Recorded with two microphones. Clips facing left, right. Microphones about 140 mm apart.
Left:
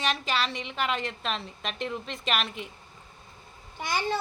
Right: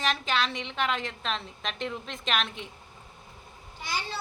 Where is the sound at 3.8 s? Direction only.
55° left (ahead or behind).